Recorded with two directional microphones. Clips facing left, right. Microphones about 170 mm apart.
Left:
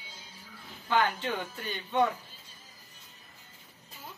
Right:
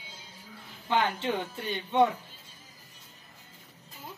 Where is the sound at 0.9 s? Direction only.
25° right (ahead or behind).